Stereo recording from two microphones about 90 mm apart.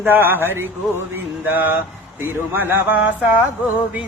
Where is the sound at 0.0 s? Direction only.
20° right (ahead or behind).